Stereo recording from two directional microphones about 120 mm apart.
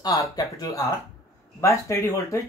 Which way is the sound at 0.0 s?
30° left (ahead or behind).